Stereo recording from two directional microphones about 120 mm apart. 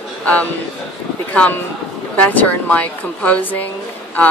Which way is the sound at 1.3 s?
10° left (ahead or behind).